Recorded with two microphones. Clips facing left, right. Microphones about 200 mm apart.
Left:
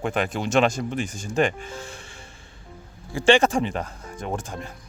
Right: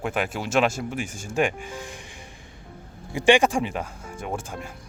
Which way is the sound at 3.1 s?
15° right (ahead or behind).